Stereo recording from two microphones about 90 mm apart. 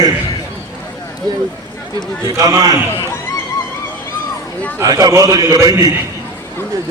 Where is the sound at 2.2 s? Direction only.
45° right (ahead or behind).